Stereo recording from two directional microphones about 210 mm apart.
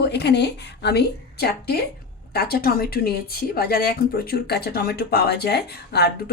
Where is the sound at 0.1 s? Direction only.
50° left (ahead or behind).